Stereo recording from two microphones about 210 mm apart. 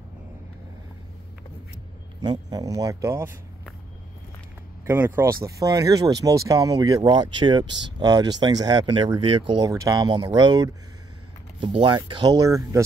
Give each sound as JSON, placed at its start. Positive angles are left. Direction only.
{"t": 2.2, "sound": "speech", "side_deg": -20}
{"t": 4.8, "sound": "speech", "side_deg": -10}